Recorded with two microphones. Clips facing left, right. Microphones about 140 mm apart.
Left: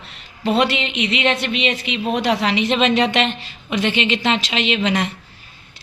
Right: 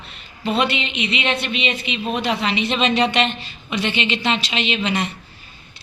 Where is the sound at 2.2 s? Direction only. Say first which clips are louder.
Left 3 dB; 85° left.